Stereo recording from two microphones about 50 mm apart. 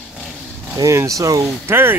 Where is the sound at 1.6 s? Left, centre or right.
Right.